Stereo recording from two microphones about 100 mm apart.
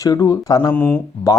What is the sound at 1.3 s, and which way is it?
Speech, 35° left (ahead or behind).